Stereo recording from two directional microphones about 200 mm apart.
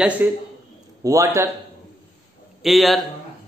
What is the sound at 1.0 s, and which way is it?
Speech, 15° right (ahead or behind).